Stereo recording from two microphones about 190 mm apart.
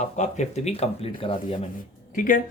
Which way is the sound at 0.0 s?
40° left (ahead or behind).